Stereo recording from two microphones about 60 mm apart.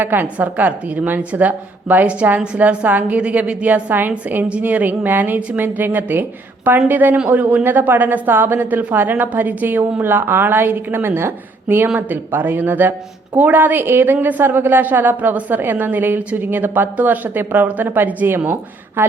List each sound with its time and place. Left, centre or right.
0.0 s a woman's voice: right